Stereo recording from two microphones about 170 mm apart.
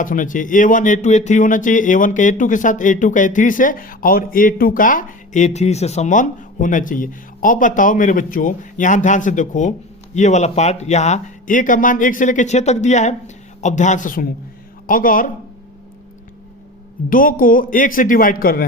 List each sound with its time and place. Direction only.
0.0 s a man's voice: 50° left (ahead or behind)
17.1 s a man's voice: 55° left (ahead or behind)